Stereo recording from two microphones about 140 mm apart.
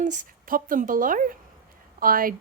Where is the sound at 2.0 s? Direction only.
90° right.